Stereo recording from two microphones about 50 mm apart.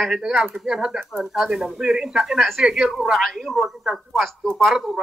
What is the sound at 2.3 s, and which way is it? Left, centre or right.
Speech, centre.